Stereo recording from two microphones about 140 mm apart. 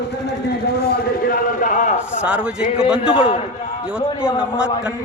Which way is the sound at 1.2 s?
80° left.